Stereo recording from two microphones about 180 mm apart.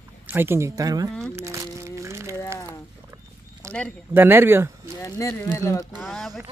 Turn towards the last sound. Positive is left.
turn(degrees=0)  # may be behind; listen again after turning